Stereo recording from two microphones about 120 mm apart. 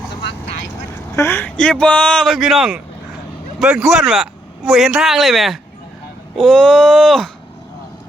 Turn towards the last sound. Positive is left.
turn(degrees=0)  # may be behind; listen again after turning